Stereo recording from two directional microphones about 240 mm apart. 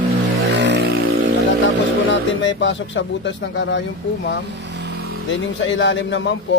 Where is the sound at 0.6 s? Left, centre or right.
Right.